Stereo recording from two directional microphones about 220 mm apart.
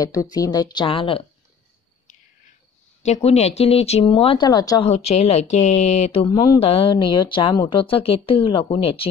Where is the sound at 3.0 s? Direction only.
30° left (ahead or behind).